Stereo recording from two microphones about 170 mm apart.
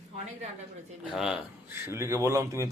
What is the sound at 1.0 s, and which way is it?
Speech, 5° right (ahead or behind).